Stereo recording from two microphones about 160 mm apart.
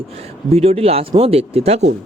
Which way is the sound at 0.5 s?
40° right (ahead or behind).